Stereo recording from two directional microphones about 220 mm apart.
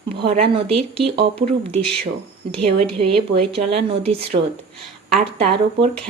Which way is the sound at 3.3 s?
25° right (ahead or behind).